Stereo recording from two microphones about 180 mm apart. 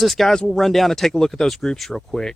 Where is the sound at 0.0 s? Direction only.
Centre (ahead or behind).